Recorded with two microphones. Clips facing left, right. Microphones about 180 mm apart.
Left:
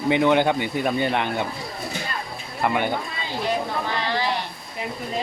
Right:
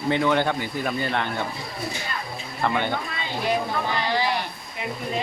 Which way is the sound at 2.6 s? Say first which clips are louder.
Left 2 dB; 10° left (ahead or behind).